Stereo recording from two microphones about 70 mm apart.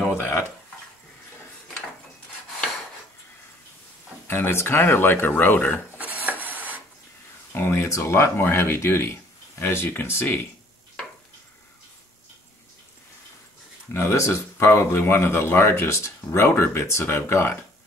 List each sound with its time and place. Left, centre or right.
0.0 s a sound: left
4.3 s speech: left
5.9 s rub: right
7.5 s speech: left
13.9 s speech: left